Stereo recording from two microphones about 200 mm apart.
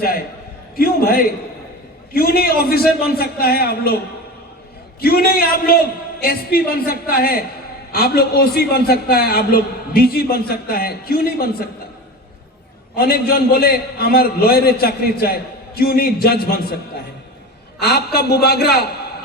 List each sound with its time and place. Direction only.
0.8 s a man's voice: 50° left (ahead or behind)
4.9 s a man's voice: 50° left (ahead or behind)
13.0 s a man's voice: 50° left (ahead or behind)